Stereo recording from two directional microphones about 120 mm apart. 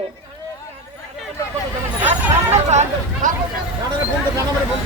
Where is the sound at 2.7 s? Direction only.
70° right (ahead or behind).